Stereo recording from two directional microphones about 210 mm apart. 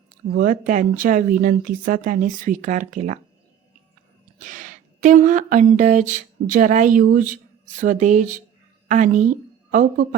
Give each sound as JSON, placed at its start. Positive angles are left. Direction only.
{"t": 0.3, "sound": "speech", "side_deg": -40}
{"t": 4.4, "sound": "a woman's voice", "side_deg": -40}